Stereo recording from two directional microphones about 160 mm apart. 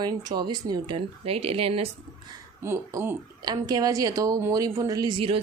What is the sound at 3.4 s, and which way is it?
A woman's voice, 25° right (ahead or behind).